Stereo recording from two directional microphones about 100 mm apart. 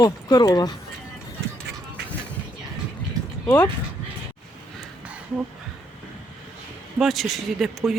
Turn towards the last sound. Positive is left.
turn(degrees=0)  # may be behind; listen again after turning